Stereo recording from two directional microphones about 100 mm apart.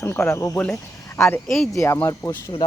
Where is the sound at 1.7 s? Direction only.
30° left (ahead or behind).